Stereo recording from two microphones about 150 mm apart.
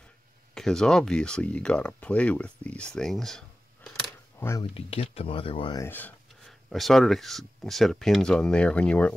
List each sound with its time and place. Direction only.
0.6 s speech: 5° left (ahead or behind)
4.4 s speech: 15° left (ahead or behind)
4.7 s speech: 40° left (ahead or behind)
5.8 s a sound: 10° left (ahead or behind)
6.7 s speech: centre (ahead or behind)